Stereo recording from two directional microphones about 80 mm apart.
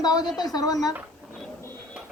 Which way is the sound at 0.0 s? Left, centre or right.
Left.